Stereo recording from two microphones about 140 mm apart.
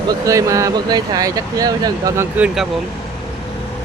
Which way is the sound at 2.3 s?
5° right (ahead or behind).